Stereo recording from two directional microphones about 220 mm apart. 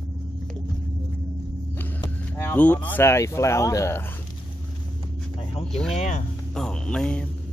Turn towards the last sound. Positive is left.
turn(degrees=5)  # may be behind; listen again after turning